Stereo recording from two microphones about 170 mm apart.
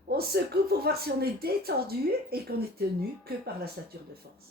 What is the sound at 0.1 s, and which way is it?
Speech, 65° right (ahead or behind).